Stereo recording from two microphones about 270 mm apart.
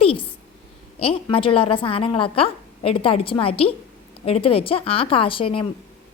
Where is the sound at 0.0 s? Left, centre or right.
Left.